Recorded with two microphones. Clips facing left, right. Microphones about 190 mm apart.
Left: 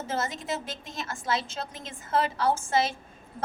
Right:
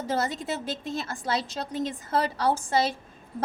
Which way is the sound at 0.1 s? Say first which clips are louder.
Right 3 dB; 35° right (ahead or behind).